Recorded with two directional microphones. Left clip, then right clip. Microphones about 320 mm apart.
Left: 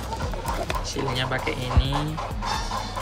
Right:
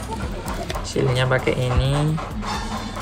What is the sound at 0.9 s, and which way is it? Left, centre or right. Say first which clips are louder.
Speech: right 8 dB; left.